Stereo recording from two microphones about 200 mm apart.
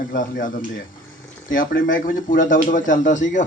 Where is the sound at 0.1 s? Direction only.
40° left (ahead or behind).